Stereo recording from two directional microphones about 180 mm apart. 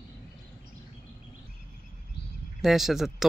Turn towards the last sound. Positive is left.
turn(degrees=0)  # may be behind; listen again after turning